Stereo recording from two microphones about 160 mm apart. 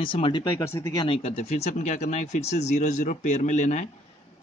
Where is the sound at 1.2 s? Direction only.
45° left (ahead or behind).